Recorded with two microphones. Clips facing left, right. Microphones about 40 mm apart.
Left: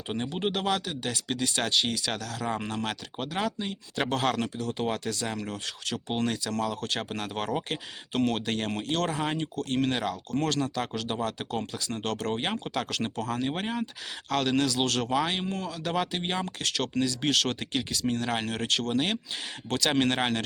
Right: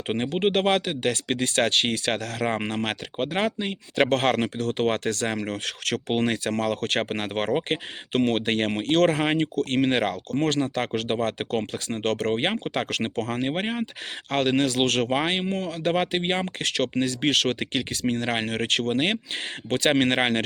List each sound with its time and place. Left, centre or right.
0.1 s speech: right
10.3 s speech: right